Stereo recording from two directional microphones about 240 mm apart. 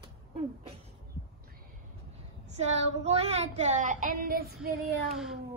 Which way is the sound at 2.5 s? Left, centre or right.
Right.